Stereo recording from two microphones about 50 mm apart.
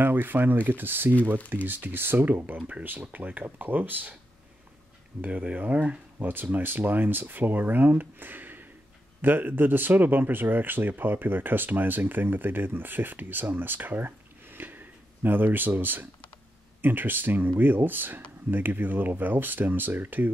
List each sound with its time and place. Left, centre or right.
0.0 s speech: right
5.2 s speech: right
6.1 s speech: right